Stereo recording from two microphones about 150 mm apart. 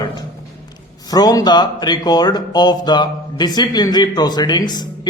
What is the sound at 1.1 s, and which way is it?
Speech, 25° left (ahead or behind).